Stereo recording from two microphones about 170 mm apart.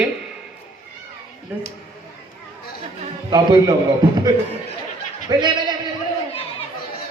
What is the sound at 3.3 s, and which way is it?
Speech, 25° right (ahead or behind).